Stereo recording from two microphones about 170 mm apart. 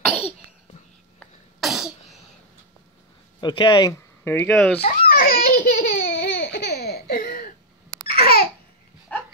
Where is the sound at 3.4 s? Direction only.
25° left (ahead or behind).